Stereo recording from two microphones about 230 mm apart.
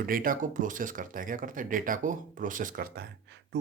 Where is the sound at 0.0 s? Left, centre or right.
Right.